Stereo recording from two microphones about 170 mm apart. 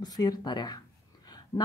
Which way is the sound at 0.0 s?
25° left (ahead or behind).